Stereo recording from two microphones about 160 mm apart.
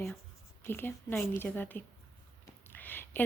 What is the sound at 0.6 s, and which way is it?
A woman's voice, 15° left (ahead or behind).